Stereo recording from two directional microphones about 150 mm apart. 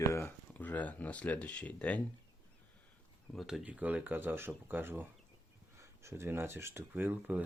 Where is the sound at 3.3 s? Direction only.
Centre (ahead or behind).